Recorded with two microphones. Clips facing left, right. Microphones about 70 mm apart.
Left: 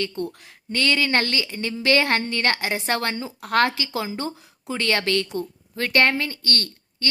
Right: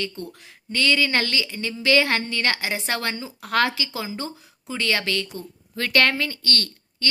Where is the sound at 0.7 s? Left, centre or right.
Left.